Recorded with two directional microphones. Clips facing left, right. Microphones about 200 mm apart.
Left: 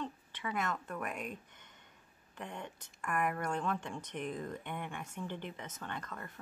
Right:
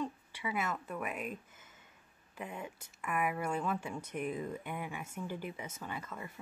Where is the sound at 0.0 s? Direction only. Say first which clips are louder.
Right 2 dB; 10° right (ahead or behind).